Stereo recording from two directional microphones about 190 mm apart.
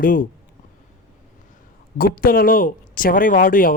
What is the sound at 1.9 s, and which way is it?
A man's voice, 50° left (ahead or behind).